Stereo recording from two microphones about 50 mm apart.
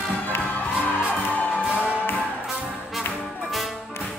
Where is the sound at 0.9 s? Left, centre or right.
Right.